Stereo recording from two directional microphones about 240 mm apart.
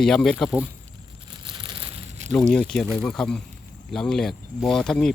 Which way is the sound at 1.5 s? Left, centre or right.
Centre.